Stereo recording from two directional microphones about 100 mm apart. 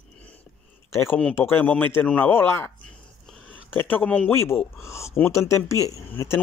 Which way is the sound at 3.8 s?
15° left (ahead or behind).